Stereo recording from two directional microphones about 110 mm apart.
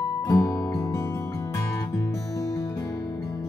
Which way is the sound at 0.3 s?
25° left (ahead or behind).